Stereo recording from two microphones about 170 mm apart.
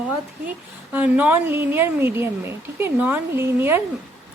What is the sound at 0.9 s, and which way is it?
A woman's voice, 10° right (ahead or behind).